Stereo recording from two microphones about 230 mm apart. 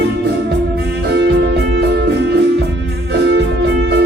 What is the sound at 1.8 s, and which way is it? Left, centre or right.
Music, right.